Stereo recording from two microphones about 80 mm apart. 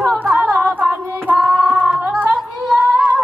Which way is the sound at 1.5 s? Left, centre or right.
Right.